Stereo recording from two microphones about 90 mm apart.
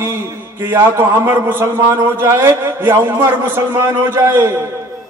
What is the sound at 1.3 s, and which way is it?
A man's voice, 25° right (ahead or behind).